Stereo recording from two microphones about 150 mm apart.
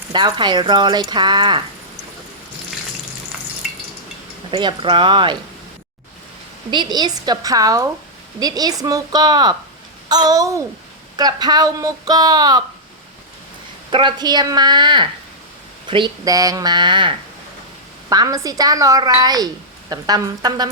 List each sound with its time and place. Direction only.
0.1 s speech: 30° right (ahead or behind)
4.5 s speech: 35° right (ahead or behind)
6.7 s speech: 30° right (ahead or behind)
13.9 s speech: 30° right (ahead or behind)